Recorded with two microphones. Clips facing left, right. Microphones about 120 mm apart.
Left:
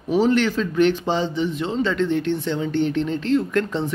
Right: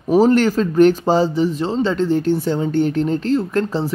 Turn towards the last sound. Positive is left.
turn(degrees=-35)  # may be behind; listen again after turning